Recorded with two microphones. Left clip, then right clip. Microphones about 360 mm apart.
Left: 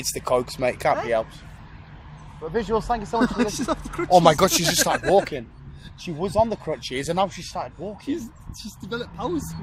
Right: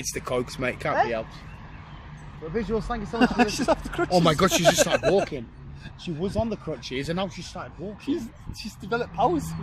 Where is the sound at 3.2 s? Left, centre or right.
Centre.